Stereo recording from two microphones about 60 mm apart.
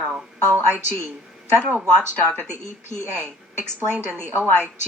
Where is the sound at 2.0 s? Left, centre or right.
Right.